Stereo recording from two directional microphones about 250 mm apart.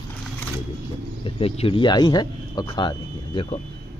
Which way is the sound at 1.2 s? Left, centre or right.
Left.